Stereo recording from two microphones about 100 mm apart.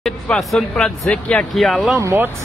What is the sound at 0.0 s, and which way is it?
Speech, centre (ahead or behind).